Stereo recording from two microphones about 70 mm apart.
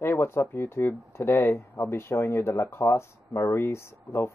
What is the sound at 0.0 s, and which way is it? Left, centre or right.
Speech, left.